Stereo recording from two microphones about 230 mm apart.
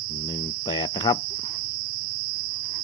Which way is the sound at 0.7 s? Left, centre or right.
Centre.